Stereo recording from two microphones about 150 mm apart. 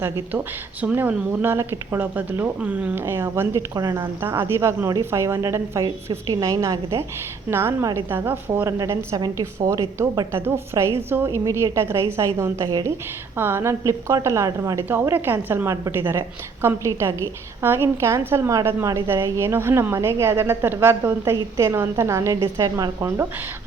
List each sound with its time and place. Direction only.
0.0 s a woman's voice: 10° right (ahead or behind); by 4.1 s 30° right (ahead or behind)
4.2 s a woman's voice: 15° right (ahead or behind)